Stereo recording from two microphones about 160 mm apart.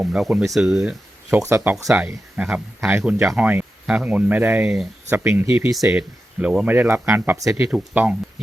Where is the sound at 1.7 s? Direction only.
Centre (ahead or behind).